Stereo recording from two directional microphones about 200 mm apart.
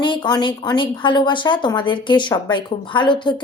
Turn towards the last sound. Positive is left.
turn(degrees=25)  # may be behind; listen again after turning